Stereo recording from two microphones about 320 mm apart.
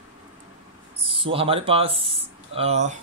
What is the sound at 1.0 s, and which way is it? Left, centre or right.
Speech, centre.